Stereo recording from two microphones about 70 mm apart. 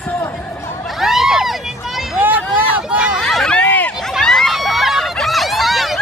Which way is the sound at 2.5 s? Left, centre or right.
Right.